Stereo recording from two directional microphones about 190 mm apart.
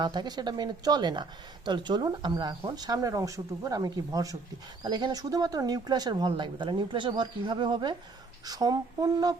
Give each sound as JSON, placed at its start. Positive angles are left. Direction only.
{"t": 0.0, "sound": "a woman's voice", "side_deg": -20}